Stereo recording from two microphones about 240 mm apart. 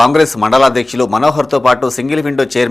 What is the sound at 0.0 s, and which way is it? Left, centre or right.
A man's voice, centre.